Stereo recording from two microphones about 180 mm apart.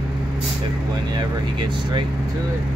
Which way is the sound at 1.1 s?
25° right (ahead or behind).